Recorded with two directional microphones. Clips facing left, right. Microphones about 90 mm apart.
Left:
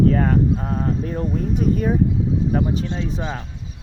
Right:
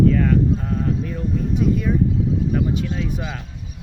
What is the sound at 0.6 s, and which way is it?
Speech, 40° left (ahead or behind).